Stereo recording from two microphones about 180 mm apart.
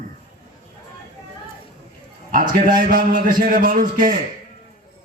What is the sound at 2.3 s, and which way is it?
A man's voice, 50° right (ahead or behind).